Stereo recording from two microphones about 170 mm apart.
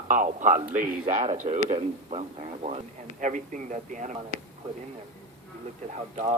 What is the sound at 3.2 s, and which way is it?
Speech, 50° right (ahead or behind).